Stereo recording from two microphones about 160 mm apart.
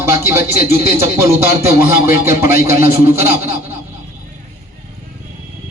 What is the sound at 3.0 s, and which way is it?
Speech, 15° right (ahead or behind).